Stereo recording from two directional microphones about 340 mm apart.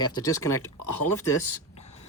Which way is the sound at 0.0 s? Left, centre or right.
Centre.